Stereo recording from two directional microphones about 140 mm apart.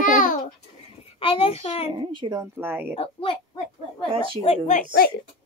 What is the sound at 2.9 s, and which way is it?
Speech, 40° left (ahead or behind).